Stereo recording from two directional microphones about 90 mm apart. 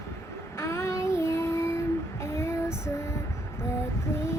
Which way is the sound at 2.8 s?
30° left (ahead or behind).